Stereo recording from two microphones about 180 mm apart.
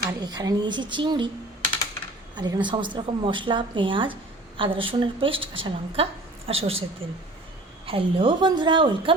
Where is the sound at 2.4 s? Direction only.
25° right (ahead or behind).